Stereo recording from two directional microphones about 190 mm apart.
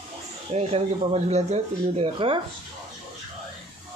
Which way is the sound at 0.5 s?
30° right (ahead or behind).